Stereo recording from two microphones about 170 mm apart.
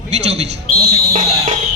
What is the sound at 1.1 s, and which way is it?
Speech, 50° right (ahead or behind).